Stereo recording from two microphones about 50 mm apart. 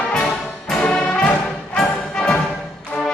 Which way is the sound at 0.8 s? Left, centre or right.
Centre.